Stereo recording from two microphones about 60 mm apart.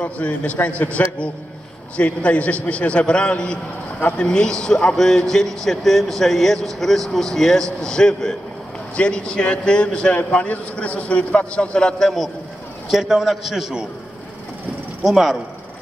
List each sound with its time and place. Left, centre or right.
0.0 s a man's voice: left
12.9 s a man's voice: centre
15.0 s a man's voice: centre